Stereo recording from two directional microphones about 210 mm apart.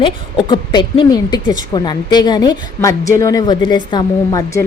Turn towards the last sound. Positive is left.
turn(degrees=15)  # may be behind; listen again after turning